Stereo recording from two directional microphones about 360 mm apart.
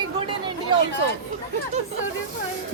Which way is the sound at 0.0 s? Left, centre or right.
Centre.